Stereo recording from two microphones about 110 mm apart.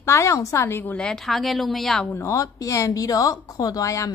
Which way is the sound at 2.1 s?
25° left (ahead or behind).